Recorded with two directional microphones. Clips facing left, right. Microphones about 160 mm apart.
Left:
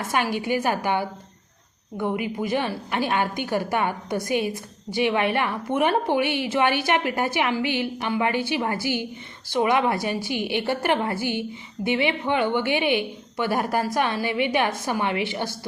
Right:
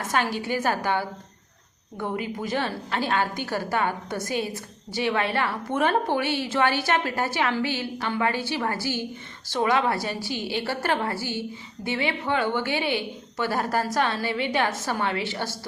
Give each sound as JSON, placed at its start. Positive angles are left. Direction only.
{"t": 0.1, "sound": "a woman's voice", "side_deg": 15}